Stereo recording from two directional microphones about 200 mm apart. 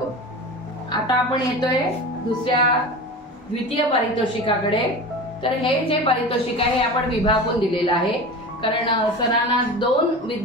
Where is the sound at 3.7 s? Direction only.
25° left (ahead or behind).